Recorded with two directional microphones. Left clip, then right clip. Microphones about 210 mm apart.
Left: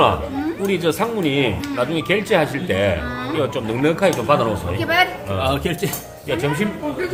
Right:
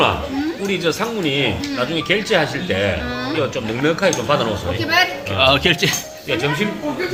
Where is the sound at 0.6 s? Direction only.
60° left (ahead or behind).